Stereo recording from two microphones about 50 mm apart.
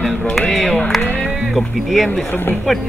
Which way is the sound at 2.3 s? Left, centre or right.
Left.